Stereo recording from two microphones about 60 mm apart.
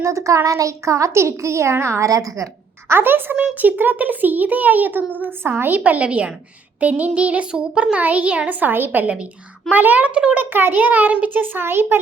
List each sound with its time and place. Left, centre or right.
0.0 s a woman's voice: right
2.0 s a woman's voice: right
2.9 s a child's voice: right
3.3 s a child's voice: right